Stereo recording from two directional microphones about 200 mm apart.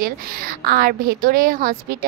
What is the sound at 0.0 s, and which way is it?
A woman's voice, 45° right (ahead or behind).